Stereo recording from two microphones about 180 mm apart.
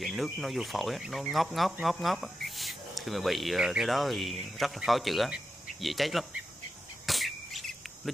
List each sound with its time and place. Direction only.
0.0 s speech: centre (ahead or behind)
7.1 s bird: centre (ahead or behind)